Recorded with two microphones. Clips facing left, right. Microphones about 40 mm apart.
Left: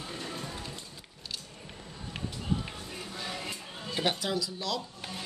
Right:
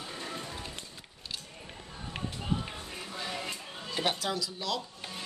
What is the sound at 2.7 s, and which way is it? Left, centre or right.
Music, centre.